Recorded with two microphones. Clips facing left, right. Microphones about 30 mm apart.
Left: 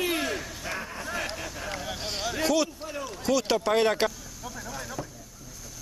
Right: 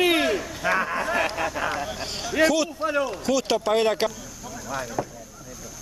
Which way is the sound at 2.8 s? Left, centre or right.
Right.